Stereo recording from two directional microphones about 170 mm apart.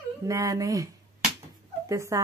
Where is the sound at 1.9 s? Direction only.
20° right (ahead or behind).